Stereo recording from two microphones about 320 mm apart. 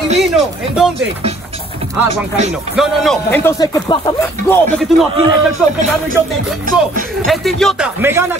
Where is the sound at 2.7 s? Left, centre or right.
Centre.